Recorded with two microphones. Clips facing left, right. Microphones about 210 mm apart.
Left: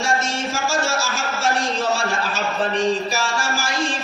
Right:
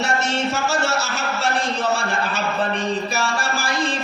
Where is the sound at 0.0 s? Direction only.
65° right (ahead or behind).